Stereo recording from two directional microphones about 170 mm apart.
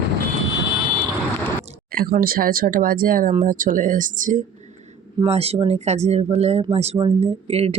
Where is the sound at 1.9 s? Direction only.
60° right (ahead or behind).